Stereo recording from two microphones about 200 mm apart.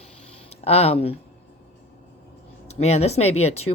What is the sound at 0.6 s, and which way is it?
Speech, 30° left (ahead or behind).